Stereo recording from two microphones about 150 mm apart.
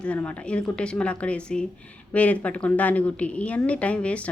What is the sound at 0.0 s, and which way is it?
Speech, 10° left (ahead or behind).